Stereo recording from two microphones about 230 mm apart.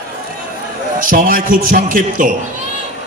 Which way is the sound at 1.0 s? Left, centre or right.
Right.